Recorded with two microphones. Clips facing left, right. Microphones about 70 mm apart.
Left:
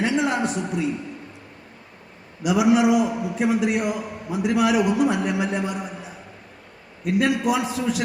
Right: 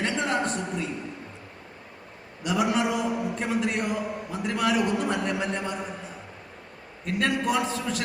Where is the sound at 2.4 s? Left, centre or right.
Centre.